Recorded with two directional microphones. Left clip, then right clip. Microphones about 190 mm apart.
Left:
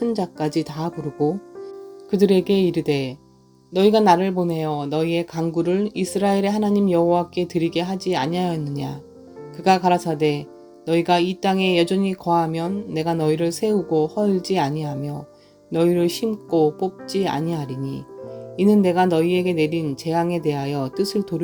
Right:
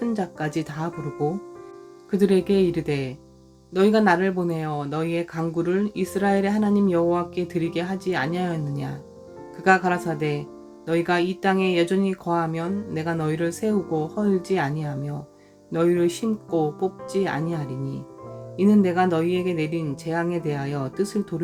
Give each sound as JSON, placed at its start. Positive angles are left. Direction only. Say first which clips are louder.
{"t": 0.0, "sound": "speech", "louder": "left 4 dB", "side_deg": 25}
{"t": 2.0, "sound": "speech", "louder": "left 3 dB", "side_deg": 25}